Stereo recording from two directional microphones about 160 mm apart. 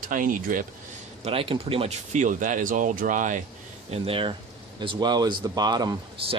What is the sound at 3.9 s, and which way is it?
Speech, 35° right (ahead or behind).